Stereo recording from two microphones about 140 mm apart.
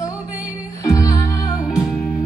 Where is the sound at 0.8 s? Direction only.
25° left (ahead or behind).